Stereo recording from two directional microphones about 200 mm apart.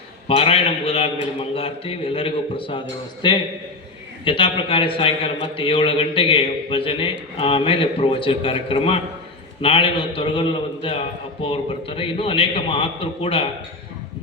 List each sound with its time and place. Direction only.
0.3 s a man's voice: 30° left (ahead or behind)